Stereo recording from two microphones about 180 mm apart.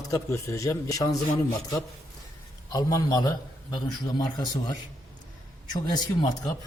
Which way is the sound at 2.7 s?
20° left (ahead or behind).